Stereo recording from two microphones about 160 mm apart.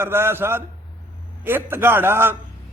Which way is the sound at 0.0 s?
15° right (ahead or behind).